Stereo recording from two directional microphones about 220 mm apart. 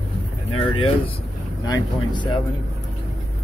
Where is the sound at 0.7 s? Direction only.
25° left (ahead or behind).